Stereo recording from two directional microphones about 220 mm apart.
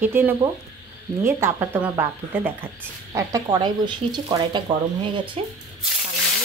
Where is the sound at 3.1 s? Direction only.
15° right (ahead or behind).